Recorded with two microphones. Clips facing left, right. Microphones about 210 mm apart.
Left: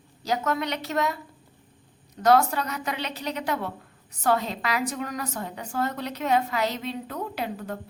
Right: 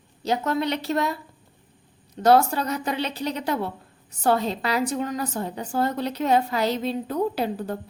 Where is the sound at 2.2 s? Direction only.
30° right (ahead or behind).